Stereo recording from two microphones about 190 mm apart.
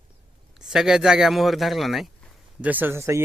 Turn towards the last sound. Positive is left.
turn(degrees=-15)  # may be behind; listen again after turning